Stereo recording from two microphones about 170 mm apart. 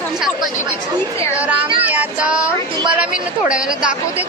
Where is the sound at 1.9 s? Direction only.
10° right (ahead or behind).